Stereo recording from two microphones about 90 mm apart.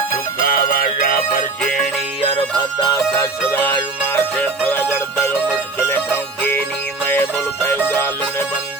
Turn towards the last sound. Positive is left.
turn(degrees=20)  # may be behind; listen again after turning